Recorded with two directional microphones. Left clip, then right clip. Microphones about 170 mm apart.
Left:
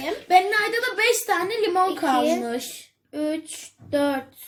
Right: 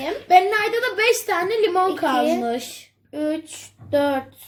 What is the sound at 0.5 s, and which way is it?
A woman's voice, 20° right (ahead or behind).